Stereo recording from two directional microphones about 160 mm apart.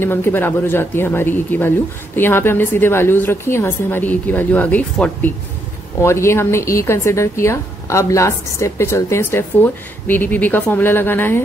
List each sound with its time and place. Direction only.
0.0 s a woman's voice: 15° left (ahead or behind)